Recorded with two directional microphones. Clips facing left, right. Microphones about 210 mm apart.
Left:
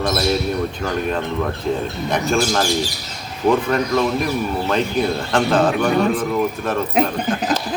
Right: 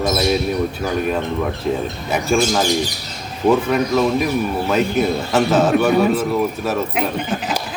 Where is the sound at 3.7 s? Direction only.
5° right (ahead or behind).